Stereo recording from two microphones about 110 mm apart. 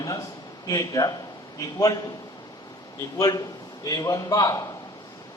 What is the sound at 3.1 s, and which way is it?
A man's voice, 35° left (ahead or behind).